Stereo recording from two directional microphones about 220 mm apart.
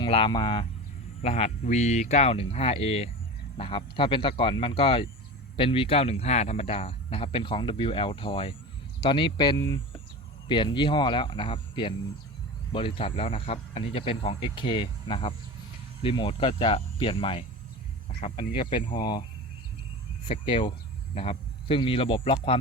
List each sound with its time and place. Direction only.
0.0 s speech: 25° left (ahead or behind)
20.2 s speech: 25° left (ahead or behind)